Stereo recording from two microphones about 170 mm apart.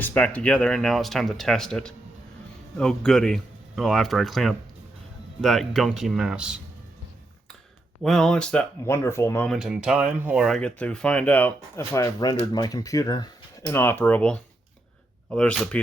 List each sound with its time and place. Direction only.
0.0 s speech: 10° left (ahead or behind)
8.0 s speech: 5° left (ahead or behind)
8.8 s speech: 15° left (ahead or behind)
9.5 s speech: centre (ahead or behind)